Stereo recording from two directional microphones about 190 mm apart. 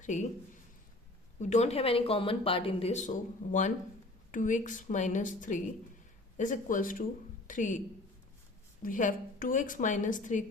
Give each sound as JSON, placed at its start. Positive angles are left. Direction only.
{"t": 0.0, "sound": "a man's voice", "side_deg": 40}
{"t": 1.4, "sound": "a woman's voice", "side_deg": 35}
{"t": 8.8, "sound": "a woman's voice", "side_deg": 45}